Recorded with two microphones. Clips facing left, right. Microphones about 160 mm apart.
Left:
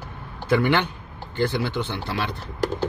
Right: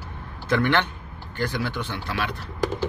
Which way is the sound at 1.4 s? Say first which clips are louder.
Left 4 dB; 25° left (ahead or behind).